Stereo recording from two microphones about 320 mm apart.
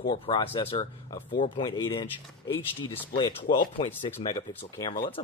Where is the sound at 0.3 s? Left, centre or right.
Centre.